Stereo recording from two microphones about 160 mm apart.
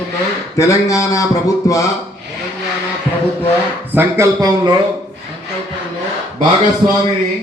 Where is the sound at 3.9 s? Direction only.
15° right (ahead or behind).